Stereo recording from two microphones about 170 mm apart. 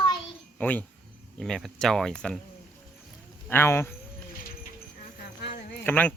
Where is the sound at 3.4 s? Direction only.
15° left (ahead or behind).